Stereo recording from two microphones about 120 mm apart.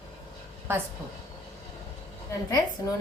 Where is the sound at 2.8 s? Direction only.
30° left (ahead or behind).